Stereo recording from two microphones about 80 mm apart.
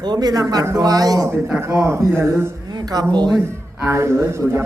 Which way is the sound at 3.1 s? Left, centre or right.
Right.